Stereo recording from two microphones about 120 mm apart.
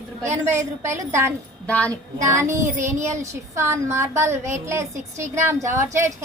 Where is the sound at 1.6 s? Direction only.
10° left (ahead or behind).